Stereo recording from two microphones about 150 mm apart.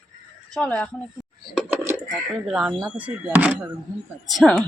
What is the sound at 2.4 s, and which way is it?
A woman's voice, 5° right (ahead or behind).